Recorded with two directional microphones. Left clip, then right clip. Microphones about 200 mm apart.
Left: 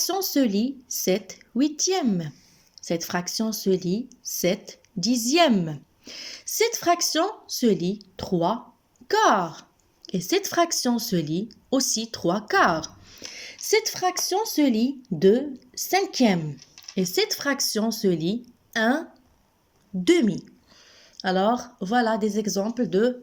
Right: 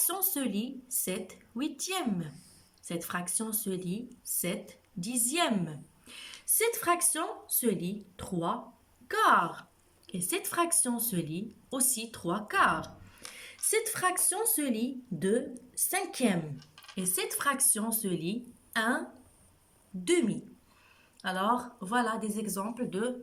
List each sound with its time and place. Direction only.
0.0 s a woman's voice: 25° left (ahead or behind)
20.1 s a woman's voice: 30° left (ahead or behind)